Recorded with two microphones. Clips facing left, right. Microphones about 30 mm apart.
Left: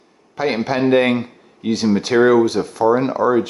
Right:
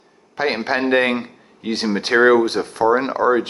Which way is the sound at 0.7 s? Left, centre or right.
Centre.